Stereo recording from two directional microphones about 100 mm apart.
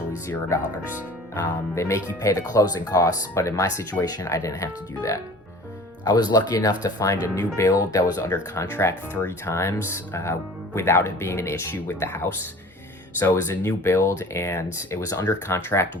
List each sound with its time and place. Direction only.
0.3 s speech: 30° left (ahead or behind)
6.1 s speech: 45° left (ahead or behind)
15.3 s speech: 25° left (ahead or behind)